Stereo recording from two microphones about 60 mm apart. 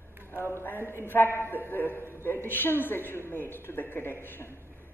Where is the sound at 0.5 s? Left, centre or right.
Left.